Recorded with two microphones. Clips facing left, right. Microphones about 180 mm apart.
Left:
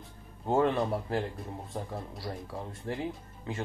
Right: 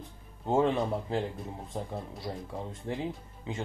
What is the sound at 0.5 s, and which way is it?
Speech, 15° right (ahead or behind).